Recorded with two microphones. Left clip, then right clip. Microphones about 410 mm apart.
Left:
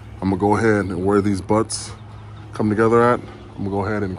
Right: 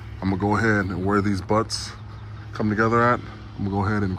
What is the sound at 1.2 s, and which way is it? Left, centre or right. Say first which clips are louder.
Speech: left 4 dB; left.